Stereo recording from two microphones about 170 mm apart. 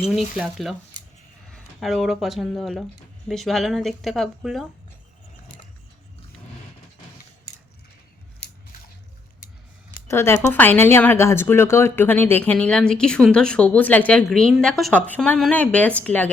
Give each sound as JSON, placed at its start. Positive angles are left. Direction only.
{"t": 0.3, "sound": "a woman's voice", "side_deg": 0}
{"t": 8.4, "sound": "a sound", "side_deg": 75}
{"t": 10.1, "sound": "speech", "side_deg": 15}